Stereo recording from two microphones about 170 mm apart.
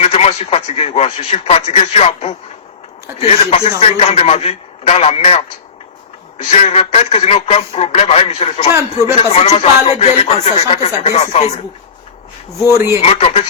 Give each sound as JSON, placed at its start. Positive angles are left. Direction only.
{"t": 0.0, "sound": "a man's voice", "side_deg": 35}
{"t": 12.7, "sound": "speech", "side_deg": -15}
{"t": 13.0, "sound": "a man's voice", "side_deg": 35}